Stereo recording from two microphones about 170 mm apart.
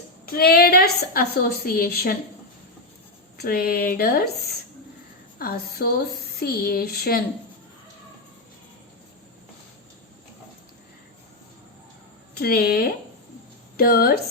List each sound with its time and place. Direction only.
0.3 s a woman's voice: 65° left (ahead or behind)
3.3 s a woman's voice: 65° left (ahead or behind)
5.4 s a woman's voice: 60° left (ahead or behind)
12.3 s a woman's voice: 65° left (ahead or behind)